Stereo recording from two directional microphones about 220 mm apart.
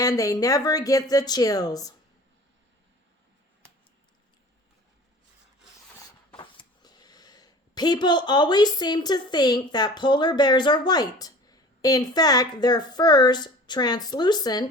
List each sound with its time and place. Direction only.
0.0 s speech: 15° left (ahead or behind)
6.3 s speech: 20° left (ahead or behind)